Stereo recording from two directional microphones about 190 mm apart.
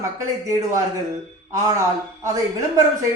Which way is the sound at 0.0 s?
15° right (ahead or behind).